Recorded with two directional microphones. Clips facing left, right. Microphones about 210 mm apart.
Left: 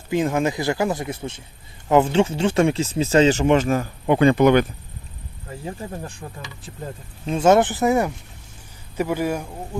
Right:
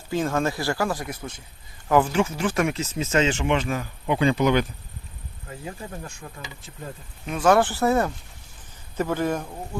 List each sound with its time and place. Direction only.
0.1 s speech: 15° left (ahead or behind); by 4.6 s 55° left (ahead or behind)
5.6 s speech: 30° left (ahead or behind); by 9.5 s 10° left (ahead or behind)